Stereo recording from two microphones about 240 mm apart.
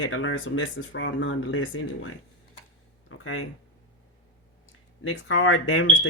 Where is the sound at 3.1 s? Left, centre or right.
Left.